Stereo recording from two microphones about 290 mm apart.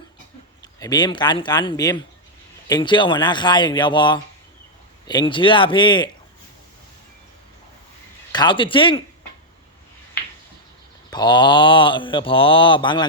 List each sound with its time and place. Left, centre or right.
0.6 s speech: centre
8.3 s speech: centre
11.1 s speech: centre